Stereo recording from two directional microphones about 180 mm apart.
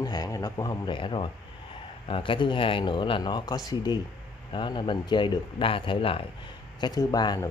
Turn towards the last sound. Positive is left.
turn(degrees=20)  # may be behind; listen again after turning